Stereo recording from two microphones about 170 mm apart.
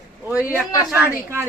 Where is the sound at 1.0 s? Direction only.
10° right (ahead or behind).